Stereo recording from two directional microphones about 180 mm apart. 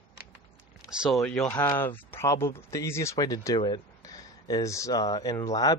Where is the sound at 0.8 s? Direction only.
5° right (ahead or behind).